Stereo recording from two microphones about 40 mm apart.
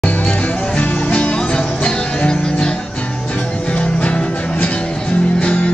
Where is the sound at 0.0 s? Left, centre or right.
Left.